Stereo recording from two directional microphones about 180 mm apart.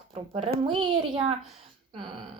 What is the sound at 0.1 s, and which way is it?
Speech, 30° right (ahead or behind).